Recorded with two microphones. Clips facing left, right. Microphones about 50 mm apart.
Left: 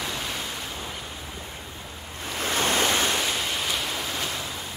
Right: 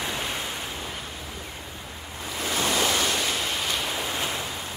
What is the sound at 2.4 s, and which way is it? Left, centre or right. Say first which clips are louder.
Waves: left 1 dB; left.